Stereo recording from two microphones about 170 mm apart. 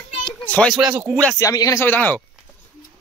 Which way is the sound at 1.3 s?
20° left (ahead or behind).